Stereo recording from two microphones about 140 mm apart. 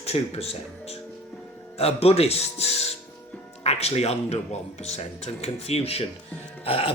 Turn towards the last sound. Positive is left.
turn(degrees=40)  # may be behind; listen again after turning